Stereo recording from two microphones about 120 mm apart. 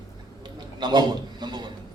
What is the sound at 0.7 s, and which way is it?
Speech, 35° right (ahead or behind).